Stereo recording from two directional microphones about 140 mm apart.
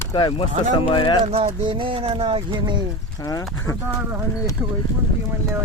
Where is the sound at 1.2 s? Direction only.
45° right (ahead or behind).